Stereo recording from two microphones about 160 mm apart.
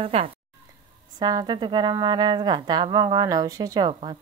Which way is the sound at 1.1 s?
25° right (ahead or behind).